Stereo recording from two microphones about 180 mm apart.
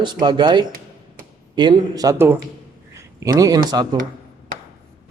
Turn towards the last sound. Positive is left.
turn(degrees=-20)  # may be behind; listen again after turning